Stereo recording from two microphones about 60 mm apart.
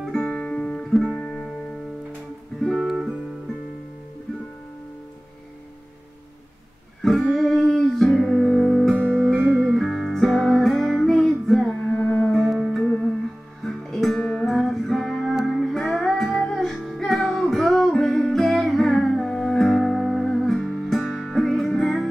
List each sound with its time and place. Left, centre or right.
0.0 s guitar: centre
2.6 s music: centre
7.0 s music: centre
9.0 s music: right
9.8 s music: centre
11.8 s music: left
12.3 s music: centre